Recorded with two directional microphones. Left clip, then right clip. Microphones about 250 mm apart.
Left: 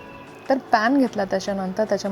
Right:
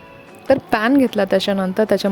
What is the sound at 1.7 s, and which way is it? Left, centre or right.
Speech, right.